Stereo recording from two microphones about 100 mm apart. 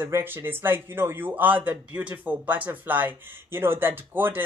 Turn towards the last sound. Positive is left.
turn(degrees=-20)  # may be behind; listen again after turning